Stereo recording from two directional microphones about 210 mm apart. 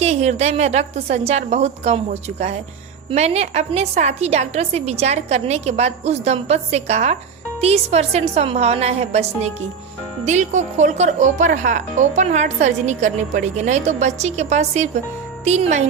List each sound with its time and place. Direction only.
0.0 s speech: 30° right (ahead or behind)
3.1 s speech: 30° right (ahead or behind)